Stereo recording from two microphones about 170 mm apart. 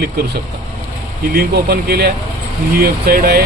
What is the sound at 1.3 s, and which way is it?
A man's voice, 65° right (ahead or behind).